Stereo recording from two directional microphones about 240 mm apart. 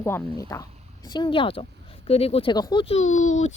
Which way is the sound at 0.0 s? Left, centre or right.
Centre.